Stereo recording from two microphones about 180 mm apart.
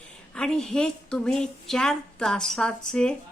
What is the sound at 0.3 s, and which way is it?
A woman's voice, 5° left (ahead or behind).